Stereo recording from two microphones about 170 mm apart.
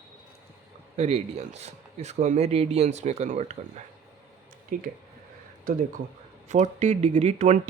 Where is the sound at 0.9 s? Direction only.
40° right (ahead or behind).